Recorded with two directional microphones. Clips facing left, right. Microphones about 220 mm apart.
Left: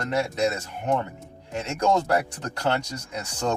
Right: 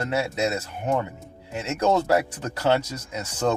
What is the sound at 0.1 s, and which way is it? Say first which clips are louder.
Speech: left 2 dB; 5° right (ahead or behind).